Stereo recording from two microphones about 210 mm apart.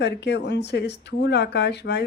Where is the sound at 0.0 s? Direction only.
55° left (ahead or behind).